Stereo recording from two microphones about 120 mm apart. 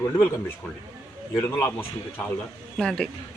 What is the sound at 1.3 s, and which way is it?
Speech, 15° left (ahead or behind).